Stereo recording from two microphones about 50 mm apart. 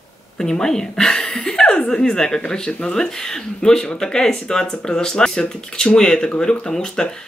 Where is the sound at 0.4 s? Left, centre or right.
Centre.